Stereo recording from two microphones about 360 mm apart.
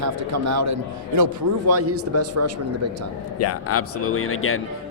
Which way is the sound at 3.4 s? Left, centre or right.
Left.